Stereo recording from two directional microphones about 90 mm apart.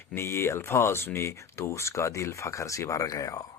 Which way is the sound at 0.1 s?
25° left (ahead or behind).